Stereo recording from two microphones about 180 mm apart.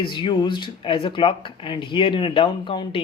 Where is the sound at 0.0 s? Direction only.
25° left (ahead or behind).